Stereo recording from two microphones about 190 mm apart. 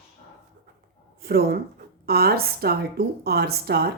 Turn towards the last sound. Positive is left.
turn(degrees=-55)  # may be behind; listen again after turning